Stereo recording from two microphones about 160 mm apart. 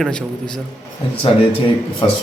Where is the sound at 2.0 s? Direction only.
35° left (ahead or behind).